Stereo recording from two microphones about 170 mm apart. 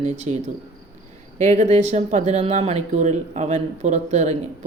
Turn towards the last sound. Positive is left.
turn(degrees=-40)  # may be behind; listen again after turning